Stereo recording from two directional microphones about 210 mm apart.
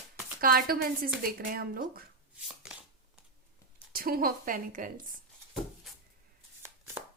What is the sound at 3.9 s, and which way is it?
A woman's voice, 45° right (ahead or behind).